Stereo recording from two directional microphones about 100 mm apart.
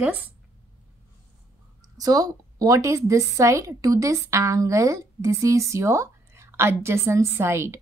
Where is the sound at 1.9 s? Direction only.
40° right (ahead or behind).